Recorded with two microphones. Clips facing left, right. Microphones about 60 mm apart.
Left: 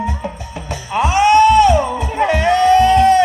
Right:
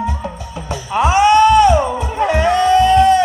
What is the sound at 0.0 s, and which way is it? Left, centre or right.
Music, left.